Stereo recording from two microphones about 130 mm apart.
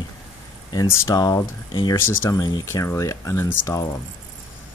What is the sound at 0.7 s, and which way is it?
Speech, 30° left (ahead or behind).